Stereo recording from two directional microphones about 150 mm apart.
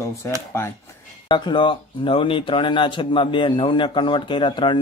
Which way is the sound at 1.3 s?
30° left (ahead or behind).